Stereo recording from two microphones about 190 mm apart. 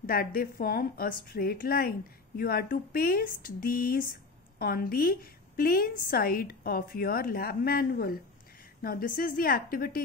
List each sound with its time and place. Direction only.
0.0 s a woman's voice: 50° left (ahead or behind)